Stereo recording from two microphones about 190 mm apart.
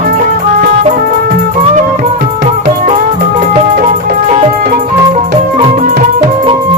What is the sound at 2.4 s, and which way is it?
Music, 40° right (ahead or behind).